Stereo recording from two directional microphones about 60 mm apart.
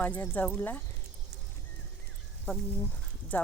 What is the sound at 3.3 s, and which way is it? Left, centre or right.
Speech, left.